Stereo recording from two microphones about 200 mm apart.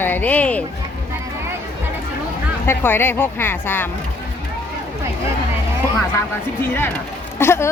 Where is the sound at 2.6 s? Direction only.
10° left (ahead or behind).